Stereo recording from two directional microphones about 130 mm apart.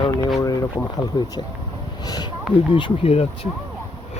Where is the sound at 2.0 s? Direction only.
30° left (ahead or behind).